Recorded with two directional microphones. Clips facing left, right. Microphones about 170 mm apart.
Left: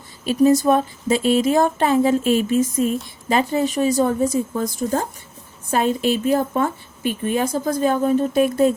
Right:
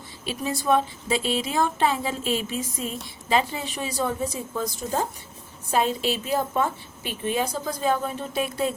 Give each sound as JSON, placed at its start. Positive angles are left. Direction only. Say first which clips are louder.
{"t": 0.3, "sound": "a woman's voice", "louder": "left 9 dB", "side_deg": 45}